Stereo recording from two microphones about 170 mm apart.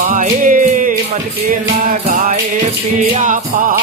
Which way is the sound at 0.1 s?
50° right (ahead or behind).